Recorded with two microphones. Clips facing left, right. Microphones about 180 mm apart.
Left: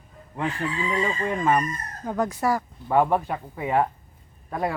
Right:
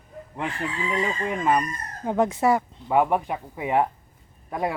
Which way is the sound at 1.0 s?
10° right (ahead or behind).